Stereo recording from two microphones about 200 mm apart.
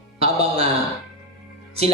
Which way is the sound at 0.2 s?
30° right (ahead or behind).